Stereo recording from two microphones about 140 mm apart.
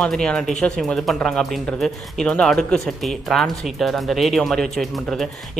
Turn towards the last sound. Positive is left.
turn(degrees=0)  # may be behind; listen again after turning